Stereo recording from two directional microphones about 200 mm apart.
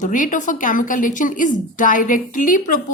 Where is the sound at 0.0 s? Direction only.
40° left (ahead or behind).